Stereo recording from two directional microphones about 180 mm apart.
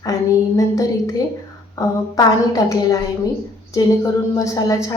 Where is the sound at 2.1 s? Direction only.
20° left (ahead or behind).